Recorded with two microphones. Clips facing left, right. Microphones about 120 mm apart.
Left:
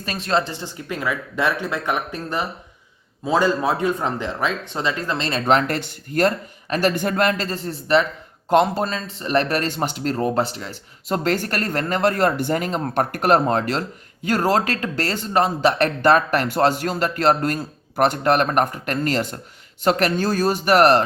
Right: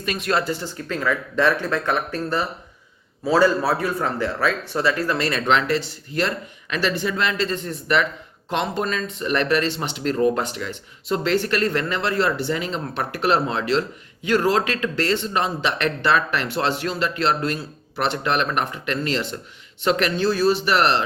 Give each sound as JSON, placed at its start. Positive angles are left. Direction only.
{"t": 0.0, "sound": "speech", "side_deg": 35}
{"t": 5.5, "sound": "speech", "side_deg": 45}